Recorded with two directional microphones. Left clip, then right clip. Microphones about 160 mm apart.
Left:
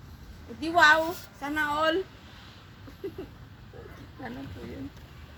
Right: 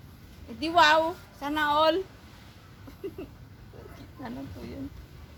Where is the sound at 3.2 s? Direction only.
10° right (ahead or behind).